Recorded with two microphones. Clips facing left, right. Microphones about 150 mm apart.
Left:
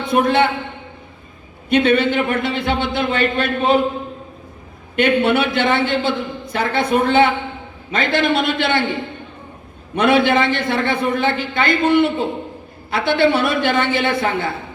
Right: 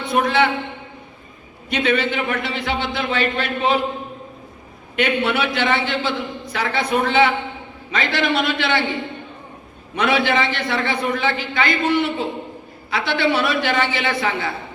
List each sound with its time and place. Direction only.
0.0 s a man's voice: 55° left (ahead or behind)
1.7 s a man's voice: 55° left (ahead or behind)
4.9 s a man's voice: 55° left (ahead or behind)
9.9 s a man's voice: 55° left (ahead or behind)